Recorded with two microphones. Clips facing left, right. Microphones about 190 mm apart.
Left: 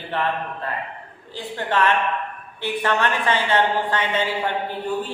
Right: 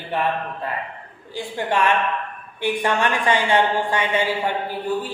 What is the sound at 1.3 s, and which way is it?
A woman's voice, 10° right (ahead or behind).